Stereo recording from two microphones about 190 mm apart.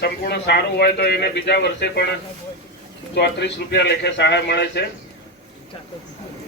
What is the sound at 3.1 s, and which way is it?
A man's voice, 60° left (ahead or behind).